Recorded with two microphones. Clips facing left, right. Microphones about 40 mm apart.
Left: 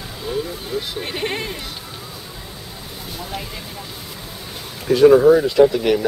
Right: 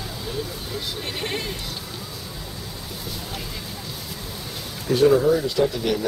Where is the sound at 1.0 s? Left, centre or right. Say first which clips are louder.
Left 4 dB; left.